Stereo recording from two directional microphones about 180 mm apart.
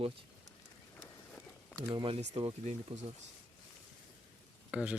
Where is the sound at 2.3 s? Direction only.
35° right (ahead or behind).